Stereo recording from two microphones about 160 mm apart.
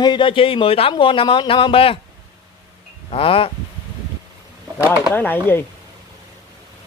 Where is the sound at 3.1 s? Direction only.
35° left (ahead or behind).